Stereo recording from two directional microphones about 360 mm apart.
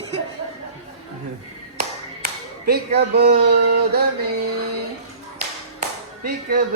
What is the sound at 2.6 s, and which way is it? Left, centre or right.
A woman's voice, right.